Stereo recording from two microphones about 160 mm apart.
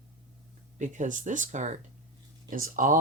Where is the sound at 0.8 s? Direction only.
50° right (ahead or behind).